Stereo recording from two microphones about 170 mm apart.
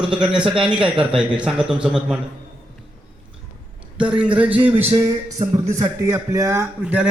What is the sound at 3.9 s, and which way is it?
A man's voice, 5° right (ahead or behind).